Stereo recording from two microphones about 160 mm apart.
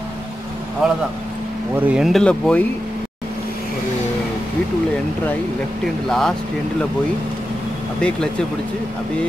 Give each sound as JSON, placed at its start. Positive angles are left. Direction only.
{"t": 0.8, "sound": "speech", "side_deg": -5}
{"t": 6.0, "sound": "speech", "side_deg": 5}